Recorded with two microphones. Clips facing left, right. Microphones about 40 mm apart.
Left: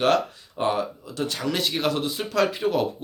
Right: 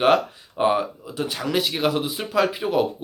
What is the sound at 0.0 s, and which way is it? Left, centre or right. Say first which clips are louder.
A man's voice: right 3 dB; centre.